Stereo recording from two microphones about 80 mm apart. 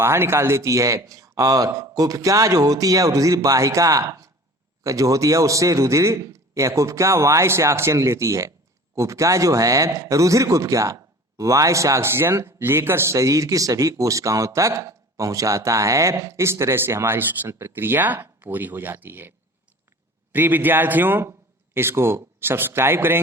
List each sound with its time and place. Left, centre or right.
0.0 s speech: right
20.3 s a man's voice: right